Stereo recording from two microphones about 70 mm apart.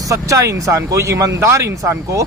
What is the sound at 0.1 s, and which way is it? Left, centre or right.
Speech, right.